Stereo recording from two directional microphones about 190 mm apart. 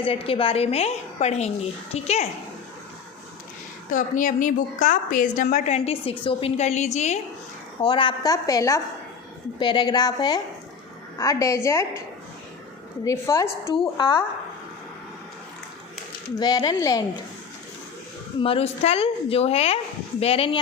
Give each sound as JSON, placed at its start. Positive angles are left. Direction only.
{"t": 0.0, "sound": "a woman's voice", "side_deg": 30}
{"t": 3.8, "sound": "a woman's voice", "side_deg": 40}
{"t": 7.8, "sound": "a woman's voice", "side_deg": 25}
{"t": 13.1, "sound": "a woman's voice", "side_deg": 15}
{"t": 13.7, "sound": "a woman's voice", "side_deg": 25}
{"t": 16.4, "sound": "a woman's voice", "side_deg": 20}
{"t": 18.3, "sound": "a woman's voice", "side_deg": 30}